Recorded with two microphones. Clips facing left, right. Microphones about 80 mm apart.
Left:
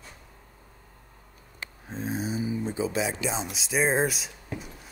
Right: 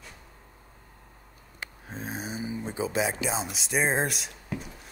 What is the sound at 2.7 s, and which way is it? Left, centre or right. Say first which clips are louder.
Speech: right 2 dB; right.